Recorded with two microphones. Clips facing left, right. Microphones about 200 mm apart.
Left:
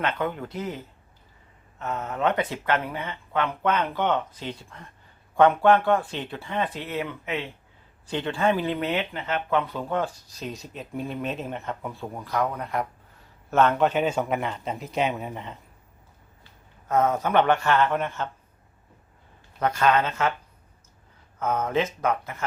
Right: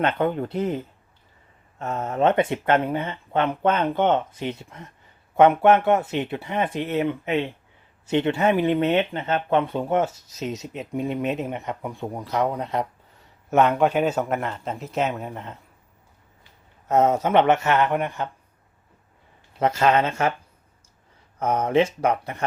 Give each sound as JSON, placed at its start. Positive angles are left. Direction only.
{"t": 0.0, "sound": "speech", "side_deg": -30}
{"t": 1.8, "sound": "speech", "side_deg": -30}
{"t": 13.5, "sound": "a man's voice", "side_deg": -15}
{"t": 16.9, "sound": "speech", "side_deg": -25}
{"t": 19.5, "sound": "speech", "side_deg": -25}
{"t": 21.3, "sound": "speech", "side_deg": -30}